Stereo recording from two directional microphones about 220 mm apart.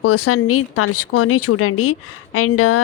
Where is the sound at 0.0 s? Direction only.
85° left.